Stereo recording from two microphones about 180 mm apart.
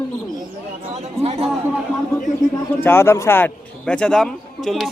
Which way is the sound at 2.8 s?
15° left (ahead or behind).